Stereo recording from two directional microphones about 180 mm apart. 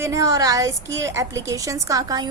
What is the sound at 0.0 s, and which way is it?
A woman's voice, 15° right (ahead or behind).